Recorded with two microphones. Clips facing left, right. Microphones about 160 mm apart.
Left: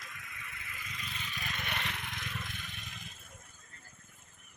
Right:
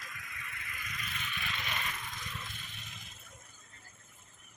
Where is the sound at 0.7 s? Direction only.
30° left (ahead or behind); by 2.2 s 70° left (ahead or behind).